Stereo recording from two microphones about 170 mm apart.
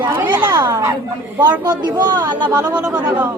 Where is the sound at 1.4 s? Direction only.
25° right (ahead or behind).